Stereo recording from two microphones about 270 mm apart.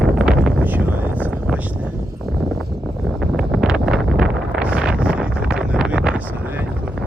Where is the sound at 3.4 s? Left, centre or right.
Centre.